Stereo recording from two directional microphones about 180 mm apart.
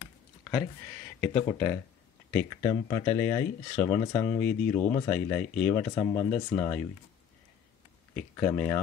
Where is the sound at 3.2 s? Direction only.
15° left (ahead or behind).